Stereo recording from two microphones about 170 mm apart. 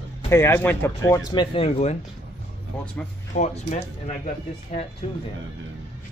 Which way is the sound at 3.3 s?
45° left (ahead or behind).